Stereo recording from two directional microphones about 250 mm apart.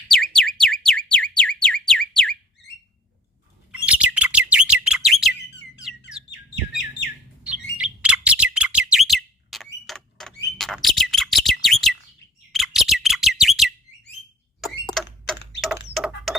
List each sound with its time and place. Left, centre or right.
0.1 s a sound: centre
3.7 s bird: centre
7.4 s chirp: centre
12.5 s bird: centre
15.0 s typing: centre
16.0 s mechanisms: centre